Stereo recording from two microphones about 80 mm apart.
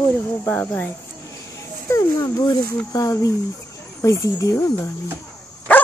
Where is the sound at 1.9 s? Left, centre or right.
Left.